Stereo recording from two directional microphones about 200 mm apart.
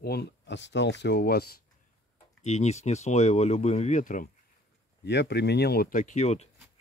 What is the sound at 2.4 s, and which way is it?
Speech, 35° left (ahead or behind).